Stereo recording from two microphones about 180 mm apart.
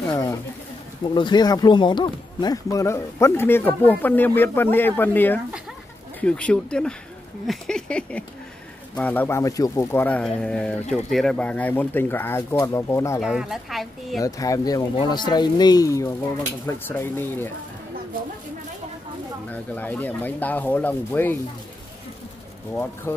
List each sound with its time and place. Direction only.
0.1 s speech: 20° left (ahead or behind)
13.2 s speech: centre (ahead or behind)
14.2 s speech: 20° left (ahead or behind)
19.5 s speech: 10° left (ahead or behind)
23.1 s speech: 15° left (ahead or behind)